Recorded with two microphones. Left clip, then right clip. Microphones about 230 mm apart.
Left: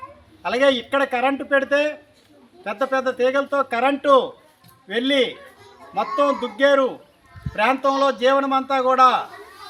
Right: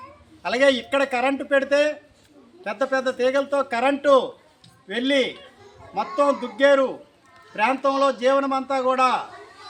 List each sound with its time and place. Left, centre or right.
0.4 s a man's voice: centre